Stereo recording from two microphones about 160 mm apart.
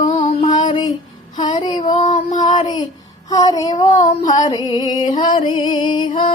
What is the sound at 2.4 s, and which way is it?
Child singing, 30° left (ahead or behind).